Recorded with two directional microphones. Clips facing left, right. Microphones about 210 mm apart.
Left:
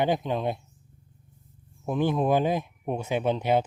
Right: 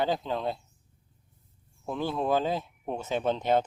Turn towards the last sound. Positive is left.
turn(degrees=10)  # may be behind; listen again after turning